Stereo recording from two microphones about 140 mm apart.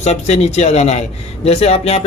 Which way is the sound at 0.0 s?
50° left (ahead or behind).